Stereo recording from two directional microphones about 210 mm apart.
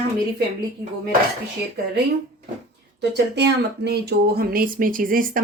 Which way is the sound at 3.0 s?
55° right (ahead or behind).